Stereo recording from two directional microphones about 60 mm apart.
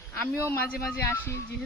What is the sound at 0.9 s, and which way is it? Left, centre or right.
Speech, left.